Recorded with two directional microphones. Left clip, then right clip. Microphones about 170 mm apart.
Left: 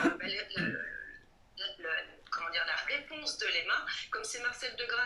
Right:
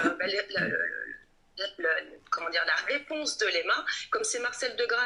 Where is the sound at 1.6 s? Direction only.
40° right (ahead or behind).